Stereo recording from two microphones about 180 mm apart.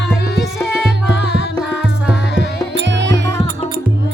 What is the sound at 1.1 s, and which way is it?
Music, 75° left (ahead or behind).